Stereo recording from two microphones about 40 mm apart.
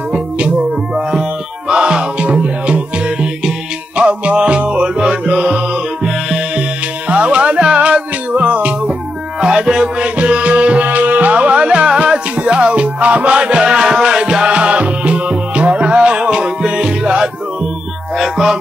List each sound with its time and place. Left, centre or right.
0.6 s music: centre
1.7 s music: right
7.1 s music: right
9.7 s music: right
18.1 s music: centre